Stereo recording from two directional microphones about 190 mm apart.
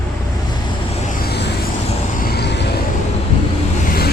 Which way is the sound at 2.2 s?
60° left (ahead or behind).